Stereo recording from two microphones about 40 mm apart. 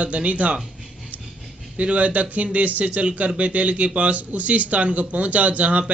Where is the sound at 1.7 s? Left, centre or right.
Right.